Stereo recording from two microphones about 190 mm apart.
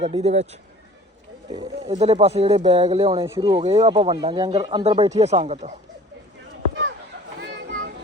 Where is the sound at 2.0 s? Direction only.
35° right (ahead or behind).